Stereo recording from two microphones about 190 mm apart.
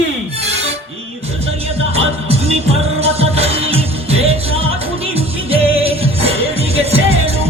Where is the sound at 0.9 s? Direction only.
30° right (ahead or behind).